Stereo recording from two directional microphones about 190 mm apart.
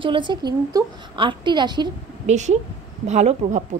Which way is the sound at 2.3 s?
40° right (ahead or behind).